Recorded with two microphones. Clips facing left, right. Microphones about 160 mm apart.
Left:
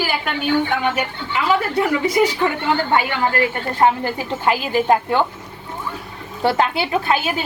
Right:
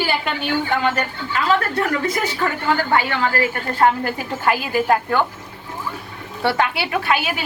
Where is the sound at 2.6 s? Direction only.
20° left (ahead or behind).